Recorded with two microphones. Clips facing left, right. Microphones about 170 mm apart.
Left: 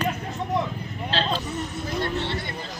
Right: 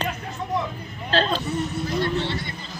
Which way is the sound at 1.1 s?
45° right (ahead or behind).